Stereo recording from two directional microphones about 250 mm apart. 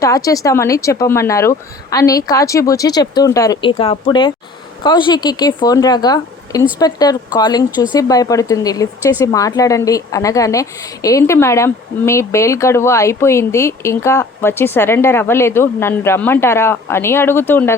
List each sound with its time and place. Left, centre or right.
0.0 s a woman's voice: centre